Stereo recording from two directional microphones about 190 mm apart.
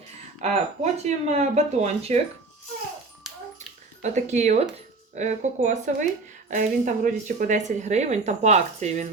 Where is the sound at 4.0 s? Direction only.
40° right (ahead or behind).